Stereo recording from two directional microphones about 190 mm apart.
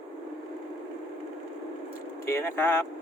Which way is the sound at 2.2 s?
10° left (ahead or behind).